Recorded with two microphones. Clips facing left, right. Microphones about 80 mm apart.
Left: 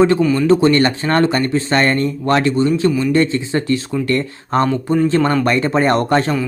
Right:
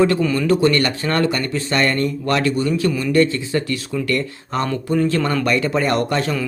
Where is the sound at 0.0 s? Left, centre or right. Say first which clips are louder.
Left 4 dB; left.